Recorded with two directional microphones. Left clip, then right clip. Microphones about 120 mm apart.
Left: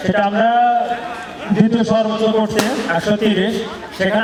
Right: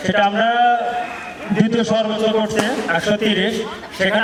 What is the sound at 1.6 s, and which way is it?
Speech, 35° right (ahead or behind).